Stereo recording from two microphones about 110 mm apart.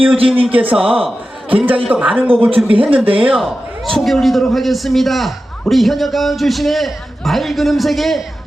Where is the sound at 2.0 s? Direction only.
15° right (ahead or behind).